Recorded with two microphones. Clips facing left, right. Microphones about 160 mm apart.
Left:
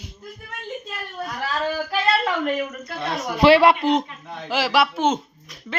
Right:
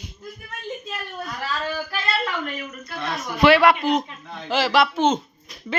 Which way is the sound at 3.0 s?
30° left (ahead or behind).